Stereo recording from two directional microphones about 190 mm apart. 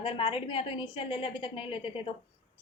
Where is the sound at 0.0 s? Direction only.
30° left (ahead or behind).